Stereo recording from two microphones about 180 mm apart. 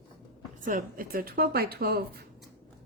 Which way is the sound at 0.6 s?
50° right (ahead or behind).